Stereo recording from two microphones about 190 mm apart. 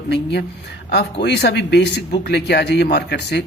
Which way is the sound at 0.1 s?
65° left (ahead or behind).